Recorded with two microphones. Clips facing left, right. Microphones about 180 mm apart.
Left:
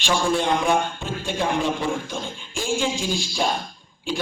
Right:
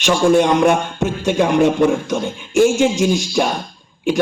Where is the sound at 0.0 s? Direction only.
70° right (ahead or behind).